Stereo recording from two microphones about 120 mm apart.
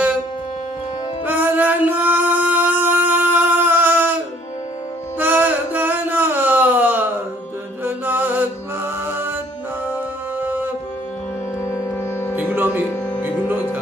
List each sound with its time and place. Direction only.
1.2 s music: 15° right (ahead or behind)
5.2 s a sound: 15° right (ahead or behind)
7.8 s music: 15° right (ahead or behind)
10.4 s music: 15° right (ahead or behind)
11.6 s music: 20° left (ahead or behind)
12.4 s music: 15° right (ahead or behind)